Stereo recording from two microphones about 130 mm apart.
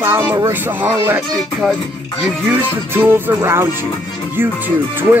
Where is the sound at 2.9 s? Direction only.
15° right (ahead or behind).